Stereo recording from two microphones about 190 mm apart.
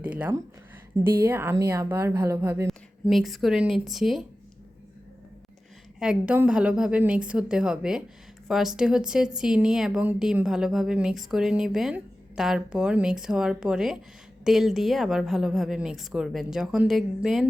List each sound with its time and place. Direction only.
0.0 s a sound: 5° right (ahead or behind)
1.2 s a woman's voice: 15° right (ahead or behind)
2.6 s a woman's voice: centre (ahead or behind)
6.0 s a woman's voice: 5° right (ahead or behind)